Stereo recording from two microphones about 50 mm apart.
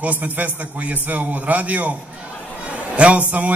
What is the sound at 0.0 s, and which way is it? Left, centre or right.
A man's voice, right.